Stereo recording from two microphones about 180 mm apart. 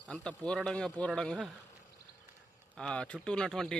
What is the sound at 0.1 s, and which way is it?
A man's voice, 5° left (ahead or behind).